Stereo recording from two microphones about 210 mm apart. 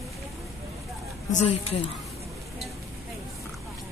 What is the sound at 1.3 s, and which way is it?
Speech, 30° left (ahead or behind).